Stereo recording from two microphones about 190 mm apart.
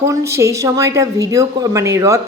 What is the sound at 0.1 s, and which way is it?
Speech, 15° right (ahead or behind).